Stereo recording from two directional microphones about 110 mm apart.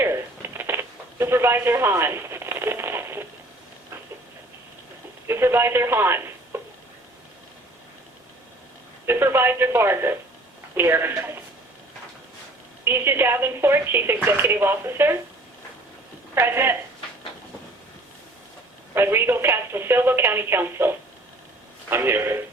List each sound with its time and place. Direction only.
0.0 s a sound: 20° right (ahead or behind)
5.3 s speech: 20° right (ahead or behind)
9.0 s speech: 20° right (ahead or behind)
12.8 s speech: 20° right (ahead or behind)
16.3 s speech: 20° right (ahead or behind)
18.9 s speech: 20° right (ahead or behind)